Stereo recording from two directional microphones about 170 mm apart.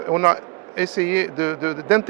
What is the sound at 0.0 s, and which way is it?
A man's voice, 15° right (ahead or behind).